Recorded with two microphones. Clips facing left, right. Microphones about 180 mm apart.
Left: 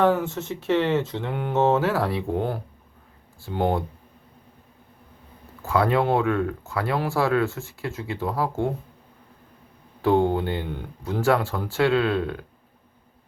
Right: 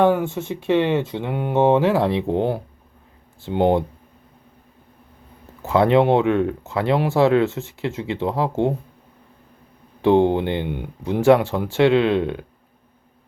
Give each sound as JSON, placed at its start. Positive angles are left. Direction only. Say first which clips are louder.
{"t": 0.0, "sound": "speech", "louder": "right 3 dB", "side_deg": -15}
{"t": 5.6, "sound": "speech", "louder": "right 6 dB", "side_deg": -20}
{"t": 10.0, "sound": "speech", "louder": "right 4 dB", "side_deg": -20}